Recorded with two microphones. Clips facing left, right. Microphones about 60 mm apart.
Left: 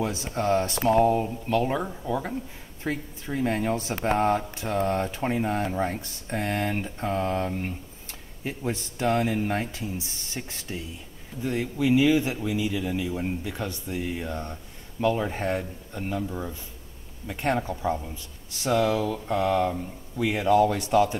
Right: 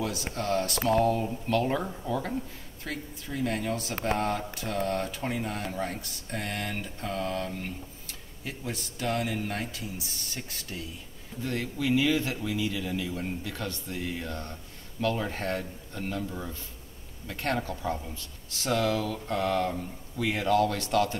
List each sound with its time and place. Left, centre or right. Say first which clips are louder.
0.3 s a man's voice: left 6 dB; left
2.8 s a man's voice: left 6 dB; left